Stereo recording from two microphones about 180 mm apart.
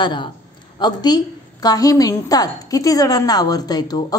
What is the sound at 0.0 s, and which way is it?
A woman's voice, 25° left (ahead or behind).